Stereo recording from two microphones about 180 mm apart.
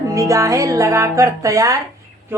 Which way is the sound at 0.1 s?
20° right (ahead or behind).